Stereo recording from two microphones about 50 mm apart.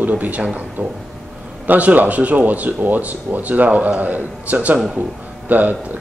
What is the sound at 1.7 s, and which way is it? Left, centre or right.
Speech, right.